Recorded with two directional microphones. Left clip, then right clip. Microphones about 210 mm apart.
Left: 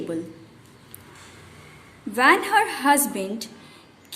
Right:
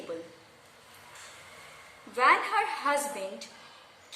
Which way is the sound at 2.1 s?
45° left (ahead or behind).